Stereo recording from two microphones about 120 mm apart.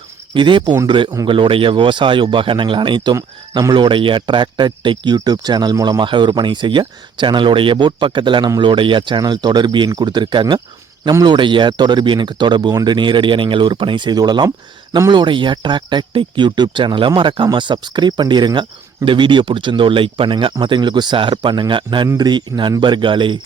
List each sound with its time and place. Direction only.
0.3 s speech: 40° right (ahead or behind)